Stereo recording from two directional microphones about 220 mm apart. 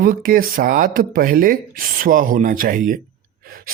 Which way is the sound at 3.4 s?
40° right (ahead or behind).